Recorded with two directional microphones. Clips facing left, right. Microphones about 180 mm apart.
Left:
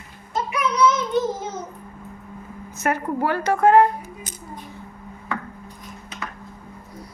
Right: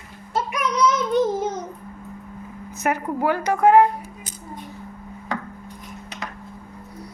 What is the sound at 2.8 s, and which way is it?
Speech, 15° right (ahead or behind).